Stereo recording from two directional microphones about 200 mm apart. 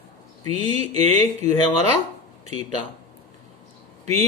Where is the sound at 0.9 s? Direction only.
30° right (ahead or behind).